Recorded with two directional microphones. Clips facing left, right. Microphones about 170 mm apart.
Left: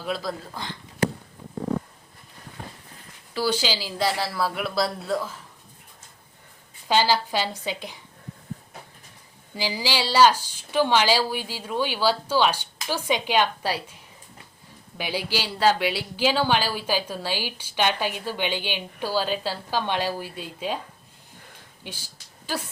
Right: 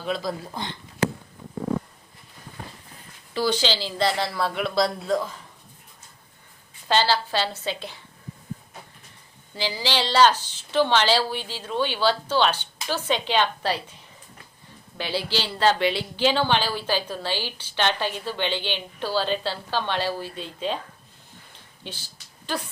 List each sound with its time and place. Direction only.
0.0 s speech: centre (ahead or behind)
0.6 s speech: 20° right (ahead or behind)
3.3 s speech: 10° left (ahead or behind)
6.8 s speech: 10° left (ahead or behind)
9.6 s speech: 10° left (ahead or behind)
14.9 s speech: 10° left (ahead or behind)
21.8 s speech: 10° left (ahead or behind)